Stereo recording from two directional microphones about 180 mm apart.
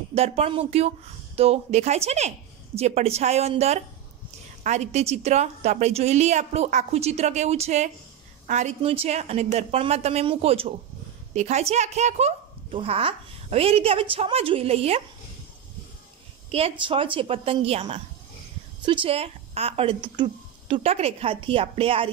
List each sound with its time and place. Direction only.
0.1 s speech: 35° right (ahead or behind)
16.5 s speech: 30° right (ahead or behind)